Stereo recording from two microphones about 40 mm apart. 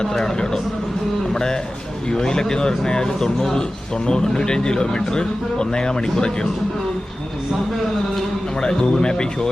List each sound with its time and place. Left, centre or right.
0.0 s speech: centre
1.3 s a sound: centre
2.0 s speech: centre
8.6 s speech: left